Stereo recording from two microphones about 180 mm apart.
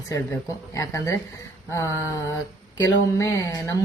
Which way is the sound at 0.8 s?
15° left (ahead or behind).